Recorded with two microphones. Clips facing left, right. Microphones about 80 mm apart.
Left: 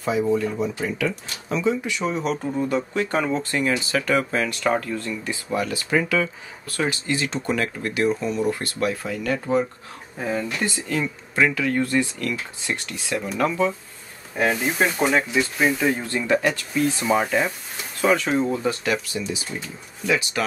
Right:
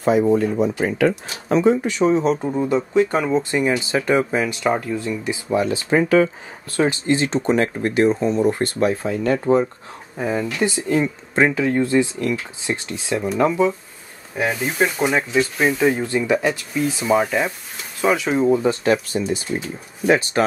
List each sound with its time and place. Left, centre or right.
0.4 s speech: right
10.1 s speech: centre
14.3 s speech: centre
18.7 s speech: right